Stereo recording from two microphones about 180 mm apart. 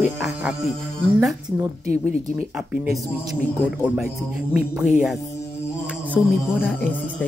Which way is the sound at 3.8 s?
5° right (ahead or behind).